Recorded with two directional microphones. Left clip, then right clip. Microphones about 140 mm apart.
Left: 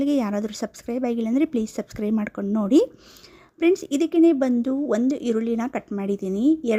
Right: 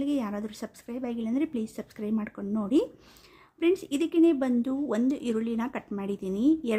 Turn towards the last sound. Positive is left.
turn(degrees=40)  # may be behind; listen again after turning